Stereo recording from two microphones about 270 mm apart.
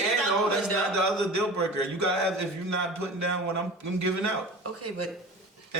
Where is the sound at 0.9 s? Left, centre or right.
Right.